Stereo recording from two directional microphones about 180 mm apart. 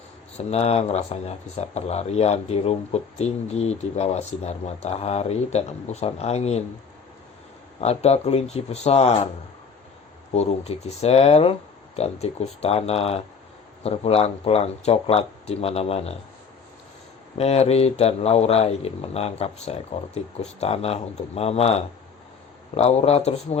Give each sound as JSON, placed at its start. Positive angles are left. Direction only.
{"t": 0.3, "sound": "speech", "side_deg": 35}
{"t": 7.8, "sound": "speech", "side_deg": 35}
{"t": 10.3, "sound": "speech", "side_deg": 35}
{"t": 17.3, "sound": "speech", "side_deg": 35}